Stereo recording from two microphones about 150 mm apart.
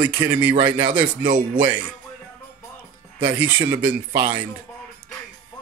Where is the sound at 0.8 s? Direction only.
35° right (ahead or behind).